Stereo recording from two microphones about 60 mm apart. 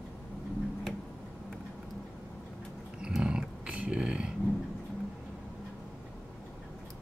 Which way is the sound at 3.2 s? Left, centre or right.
Centre.